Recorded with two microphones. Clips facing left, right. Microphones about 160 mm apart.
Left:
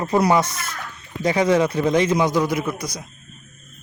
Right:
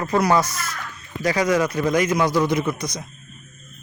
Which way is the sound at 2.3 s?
10° left (ahead or behind).